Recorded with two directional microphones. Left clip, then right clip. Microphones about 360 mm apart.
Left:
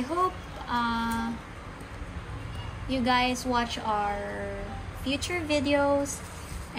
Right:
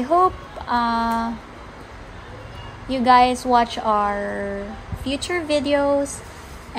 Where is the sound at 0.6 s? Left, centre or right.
Right.